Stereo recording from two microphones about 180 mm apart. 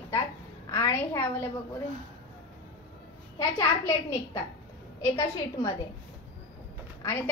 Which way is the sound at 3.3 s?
20° left (ahead or behind).